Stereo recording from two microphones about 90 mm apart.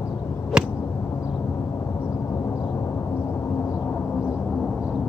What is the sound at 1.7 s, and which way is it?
Gong, 30° left (ahead or behind).